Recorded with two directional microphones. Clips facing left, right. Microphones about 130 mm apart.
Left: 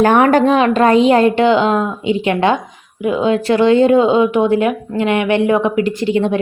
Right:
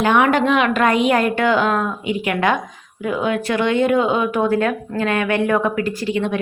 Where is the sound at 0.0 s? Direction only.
45° left (ahead or behind).